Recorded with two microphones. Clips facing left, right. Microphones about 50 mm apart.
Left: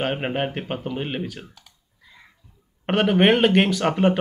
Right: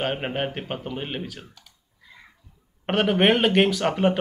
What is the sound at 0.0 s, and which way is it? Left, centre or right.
A man's voice, centre.